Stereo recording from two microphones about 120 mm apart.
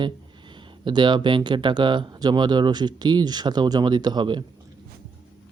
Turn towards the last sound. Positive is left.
turn(degrees=-40)  # may be behind; listen again after turning